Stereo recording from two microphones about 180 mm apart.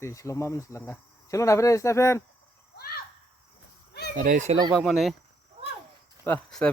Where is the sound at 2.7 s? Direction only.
60° left (ahead or behind).